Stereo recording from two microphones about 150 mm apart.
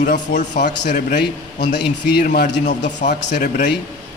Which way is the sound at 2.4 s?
55° left (ahead or behind).